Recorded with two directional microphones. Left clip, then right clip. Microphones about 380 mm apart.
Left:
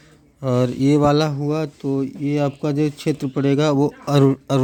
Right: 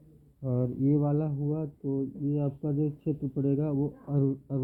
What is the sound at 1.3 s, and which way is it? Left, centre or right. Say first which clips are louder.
Speech: left 11 dB; left.